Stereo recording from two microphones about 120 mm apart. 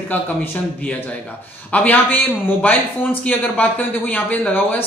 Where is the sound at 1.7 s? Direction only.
15° left (ahead or behind).